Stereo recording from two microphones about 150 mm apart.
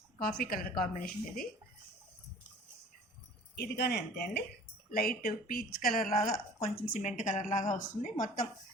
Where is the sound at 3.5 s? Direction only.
90° left.